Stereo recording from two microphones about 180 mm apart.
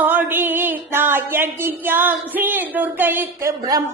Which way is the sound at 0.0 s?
10° right (ahead or behind).